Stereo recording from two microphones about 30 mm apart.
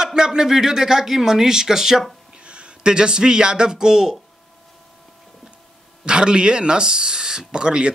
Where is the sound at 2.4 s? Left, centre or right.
Right.